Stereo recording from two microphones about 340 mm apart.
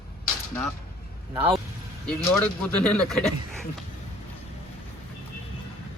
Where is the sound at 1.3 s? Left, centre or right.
Centre.